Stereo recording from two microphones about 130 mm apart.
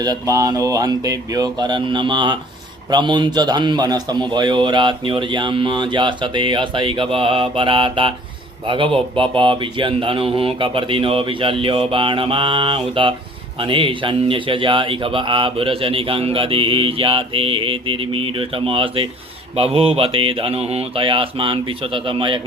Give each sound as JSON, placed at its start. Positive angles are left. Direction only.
{"t": 0.0, "sound": "a man's voice", "side_deg": -25}